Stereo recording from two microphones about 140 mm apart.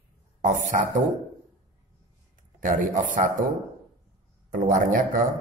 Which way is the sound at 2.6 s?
70° right (ahead or behind).